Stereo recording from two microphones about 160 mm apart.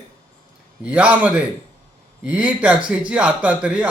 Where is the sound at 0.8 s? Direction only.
10° right (ahead or behind).